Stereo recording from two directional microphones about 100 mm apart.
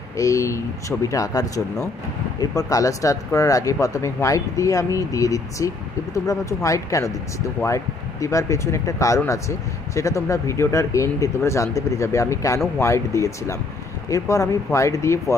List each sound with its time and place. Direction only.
0.2 s speech: 30° left (ahead or behind)